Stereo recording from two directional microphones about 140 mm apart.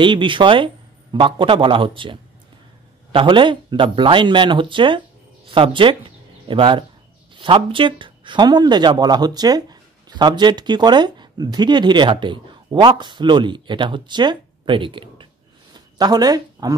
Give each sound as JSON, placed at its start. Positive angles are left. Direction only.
{"t": 0.0, "sound": "speech", "side_deg": -35}